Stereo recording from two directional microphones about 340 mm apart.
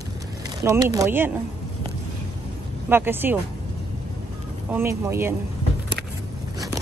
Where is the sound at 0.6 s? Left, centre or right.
Centre.